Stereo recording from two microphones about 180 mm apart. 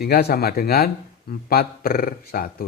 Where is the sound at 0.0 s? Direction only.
60° left (ahead or behind).